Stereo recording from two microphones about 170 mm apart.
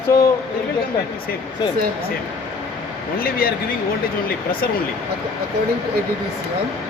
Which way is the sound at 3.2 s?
60° left (ahead or behind).